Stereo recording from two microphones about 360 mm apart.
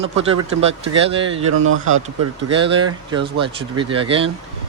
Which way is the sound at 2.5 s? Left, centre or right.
Centre.